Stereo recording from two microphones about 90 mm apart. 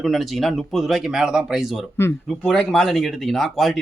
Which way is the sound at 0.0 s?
Centre (ahead or behind).